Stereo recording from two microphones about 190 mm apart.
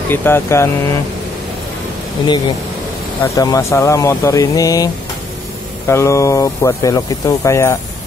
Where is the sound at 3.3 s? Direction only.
20° left (ahead or behind).